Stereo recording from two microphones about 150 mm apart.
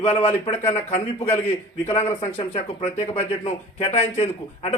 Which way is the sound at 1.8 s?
15° left (ahead or behind).